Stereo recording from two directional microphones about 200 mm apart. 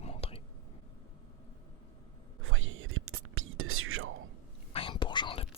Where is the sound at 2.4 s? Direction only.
85° right.